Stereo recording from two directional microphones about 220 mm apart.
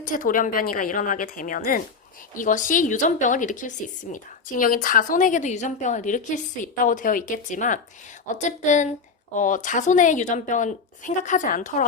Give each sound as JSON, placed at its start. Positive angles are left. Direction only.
{"t": 0.0, "sound": "a woman's voice", "side_deg": 35}